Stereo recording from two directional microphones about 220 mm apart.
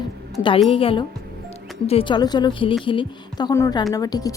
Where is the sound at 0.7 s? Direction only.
25° left (ahead or behind).